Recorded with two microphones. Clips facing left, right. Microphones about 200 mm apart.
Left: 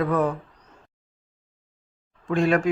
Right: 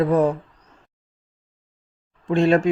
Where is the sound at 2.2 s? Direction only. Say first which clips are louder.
Right 4 dB; 25° right (ahead or behind).